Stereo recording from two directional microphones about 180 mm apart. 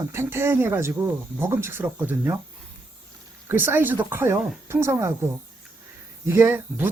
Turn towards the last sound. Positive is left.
turn(degrees=-10)  # may be behind; listen again after turning